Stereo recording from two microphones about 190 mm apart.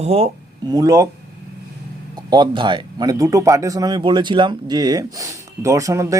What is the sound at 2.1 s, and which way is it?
Speech, 20° right (ahead or behind).